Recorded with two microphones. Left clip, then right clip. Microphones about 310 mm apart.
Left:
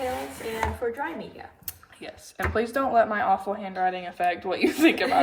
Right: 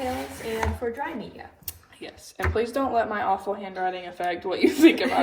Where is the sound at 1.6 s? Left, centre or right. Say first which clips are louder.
Even; left.